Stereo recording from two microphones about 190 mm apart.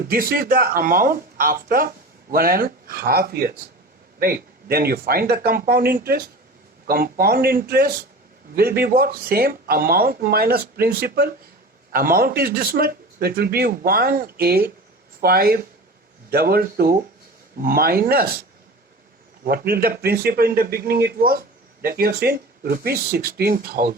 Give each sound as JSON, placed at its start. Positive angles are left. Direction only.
{"t": 0.1, "sound": "speech", "side_deg": -50}
{"t": 19.5, "sound": "speech", "side_deg": -55}